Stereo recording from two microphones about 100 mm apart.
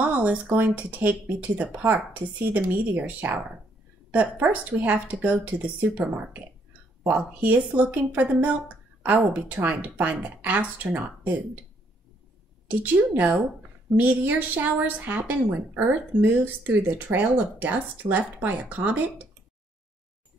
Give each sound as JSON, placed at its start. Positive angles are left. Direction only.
{"t": 0.0, "sound": "a woman's voice", "side_deg": -15}
{"t": 12.6, "sound": "a woman's voice", "side_deg": -15}